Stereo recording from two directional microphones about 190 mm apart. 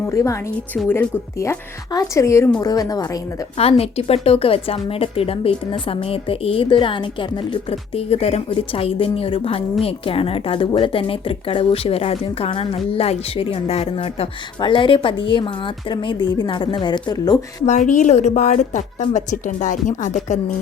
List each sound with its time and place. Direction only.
0.0 s a woman's voice: 15° left (ahead or behind)
3.6 s a woman's voice: 30° left (ahead or behind)
17.7 s a woman's voice: 40° left (ahead or behind)